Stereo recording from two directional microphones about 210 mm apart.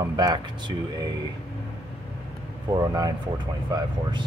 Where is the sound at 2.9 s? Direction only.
20° right (ahead or behind).